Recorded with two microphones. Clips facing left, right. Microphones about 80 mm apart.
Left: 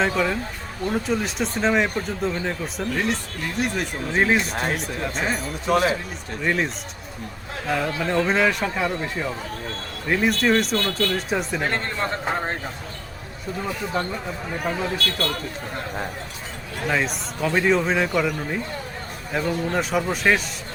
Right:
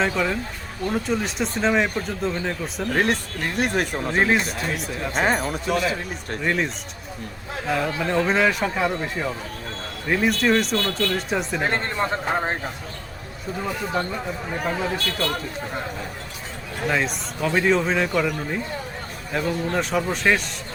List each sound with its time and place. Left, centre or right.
0.9 s speech: centre
2.9 s speech: right
4.1 s speech: centre
4.5 s speech: left
5.1 s speech: right
5.6 s speech: left
6.4 s speech: centre
7.7 s speech: centre
11.6 s a man's voice: centre
14.6 s speech: centre
16.8 s speech: centre